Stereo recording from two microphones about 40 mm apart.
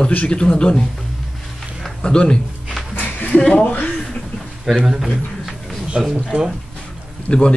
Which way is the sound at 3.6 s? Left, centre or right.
Left.